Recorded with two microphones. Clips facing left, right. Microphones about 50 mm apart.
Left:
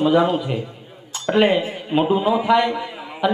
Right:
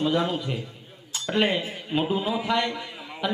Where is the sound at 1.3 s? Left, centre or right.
Centre.